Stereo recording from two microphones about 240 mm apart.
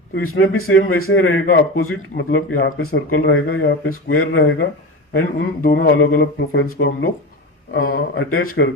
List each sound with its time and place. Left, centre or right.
0.1 s a man's voice: left